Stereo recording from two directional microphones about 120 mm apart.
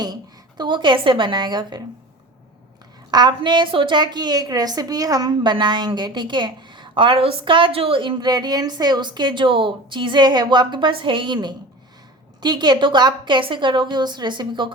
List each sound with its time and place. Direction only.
0.0 s a woman's voice: 35° right (ahead or behind)
3.1 s a woman's voice: 35° right (ahead or behind)